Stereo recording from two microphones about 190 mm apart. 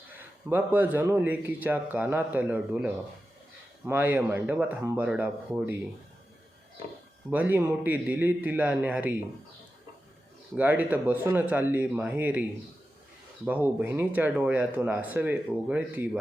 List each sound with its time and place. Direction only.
0.2 s speech: 10° right (ahead or behind)
7.3 s speech: 10° right (ahead or behind)
10.6 s speech: 10° right (ahead or behind)